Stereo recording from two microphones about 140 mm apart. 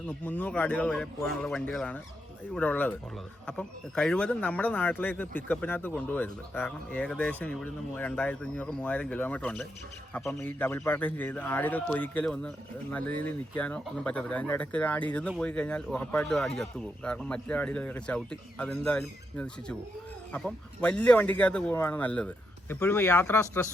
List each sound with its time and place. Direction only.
0.1 s speech: 10° left (ahead or behind)